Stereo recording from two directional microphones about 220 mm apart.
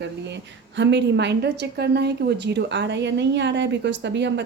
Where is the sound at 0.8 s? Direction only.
50° right (ahead or behind).